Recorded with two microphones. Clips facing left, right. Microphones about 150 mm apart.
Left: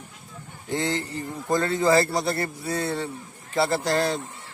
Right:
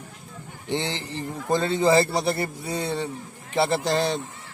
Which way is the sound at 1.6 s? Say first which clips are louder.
Right 1 dB; 20° right (ahead or behind).